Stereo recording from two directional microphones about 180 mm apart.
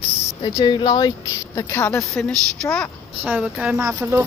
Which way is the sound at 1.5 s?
15° left (ahead or behind).